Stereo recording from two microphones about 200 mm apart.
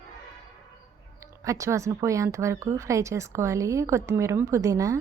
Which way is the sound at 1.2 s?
15° right (ahead or behind).